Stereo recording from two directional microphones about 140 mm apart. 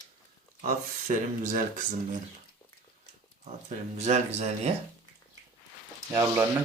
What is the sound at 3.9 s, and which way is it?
Speech, 55° right (ahead or behind).